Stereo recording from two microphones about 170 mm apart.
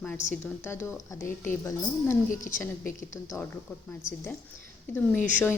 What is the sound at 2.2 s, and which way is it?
Speech, 50° left (ahead or behind).